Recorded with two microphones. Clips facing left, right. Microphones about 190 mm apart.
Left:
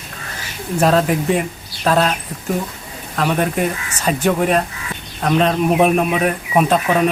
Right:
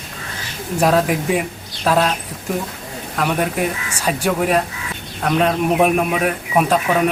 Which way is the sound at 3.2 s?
5° right (ahead or behind).